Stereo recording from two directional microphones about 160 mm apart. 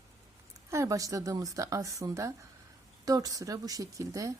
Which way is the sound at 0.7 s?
20° right (ahead or behind).